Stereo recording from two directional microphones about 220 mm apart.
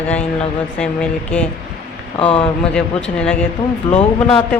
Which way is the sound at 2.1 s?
25° left (ahead or behind).